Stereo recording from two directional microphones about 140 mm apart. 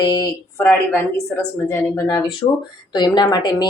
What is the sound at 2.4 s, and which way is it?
A woman's voice, 35° left (ahead or behind).